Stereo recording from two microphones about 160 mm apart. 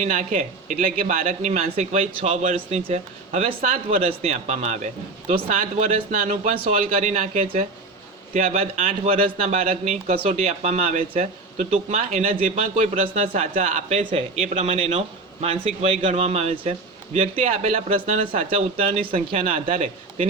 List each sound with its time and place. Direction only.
0.0 s speech: 55° right (ahead or behind)
7.4 s speech: 40° right (ahead or behind)
14.0 s speech: 35° right (ahead or behind)